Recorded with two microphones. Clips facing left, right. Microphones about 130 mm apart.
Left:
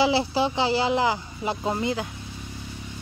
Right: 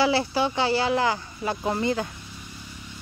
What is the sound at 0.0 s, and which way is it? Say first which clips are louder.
Speech: left 1 dB; 20° left (ahead or behind).